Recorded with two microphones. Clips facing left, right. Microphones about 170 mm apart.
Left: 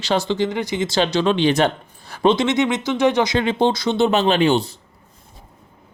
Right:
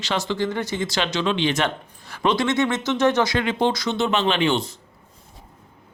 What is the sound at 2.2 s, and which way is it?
Speech, 20° left (ahead or behind).